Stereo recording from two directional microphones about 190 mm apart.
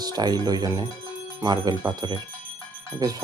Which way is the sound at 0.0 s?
20° right (ahead or behind).